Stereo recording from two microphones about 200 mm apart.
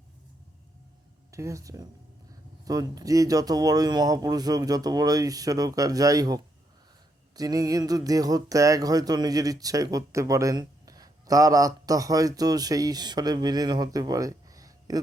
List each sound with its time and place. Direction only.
1.3 s speech: 15° right (ahead or behind)